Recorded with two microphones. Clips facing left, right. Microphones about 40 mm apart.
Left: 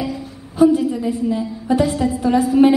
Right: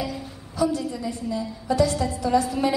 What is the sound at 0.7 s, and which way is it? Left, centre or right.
A woman's voice, left.